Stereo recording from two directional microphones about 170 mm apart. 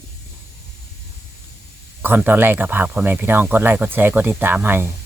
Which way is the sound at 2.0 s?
10° right (ahead or behind).